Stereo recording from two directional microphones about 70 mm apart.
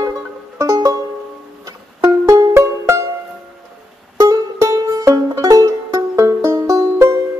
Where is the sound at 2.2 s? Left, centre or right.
Right.